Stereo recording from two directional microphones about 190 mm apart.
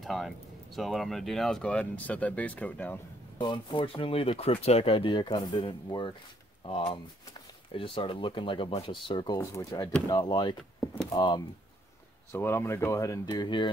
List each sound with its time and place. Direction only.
0.0 s speech: centre (ahead or behind)
3.3 s speech: 25° left (ahead or behind)
12.3 s speech: 10° left (ahead or behind)